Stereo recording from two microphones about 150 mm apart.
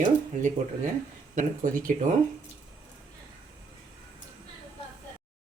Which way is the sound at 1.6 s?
60° right (ahead or behind).